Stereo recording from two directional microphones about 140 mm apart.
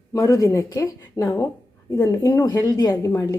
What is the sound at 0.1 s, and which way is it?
A woman's voice, 20° left (ahead or behind).